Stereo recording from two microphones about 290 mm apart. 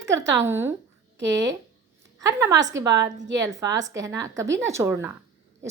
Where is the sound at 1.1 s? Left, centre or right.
Right.